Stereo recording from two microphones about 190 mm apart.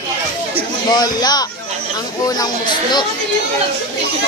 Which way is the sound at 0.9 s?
20° left (ahead or behind).